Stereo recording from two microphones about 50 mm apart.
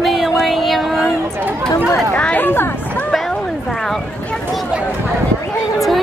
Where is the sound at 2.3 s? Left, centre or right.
Left.